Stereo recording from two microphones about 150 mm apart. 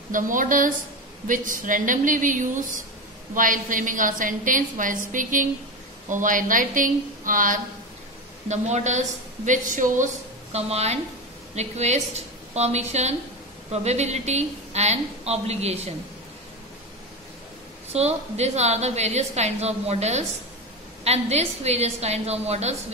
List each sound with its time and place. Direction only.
0.1 s a woman's voice: 60° right (ahead or behind)
8.5 s a woman's voice: 50° right (ahead or behind)
17.9 s a woman's voice: 45° right (ahead or behind)